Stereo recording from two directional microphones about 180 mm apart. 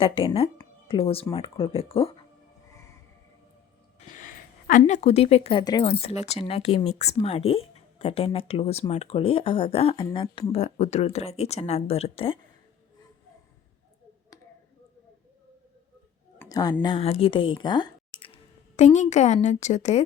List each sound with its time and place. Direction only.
0.0 s speech: 30° left (ahead or behind)
4.0 s speech: 45° left (ahead or behind)
16.4 s a sound: 20° left (ahead or behind)
16.8 s speech: 30° left (ahead or behind)
18.8 s speech: 40° left (ahead or behind)